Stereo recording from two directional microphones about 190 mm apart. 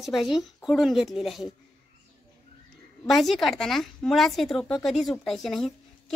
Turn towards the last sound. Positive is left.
turn(degrees=0)  # may be behind; listen again after turning